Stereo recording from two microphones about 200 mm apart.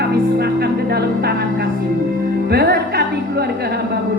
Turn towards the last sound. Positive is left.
turn(degrees=-50)  # may be behind; listen again after turning